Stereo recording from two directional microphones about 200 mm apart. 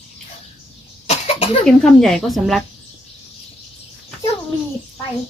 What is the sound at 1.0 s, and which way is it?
Cough, 30° left (ahead or behind).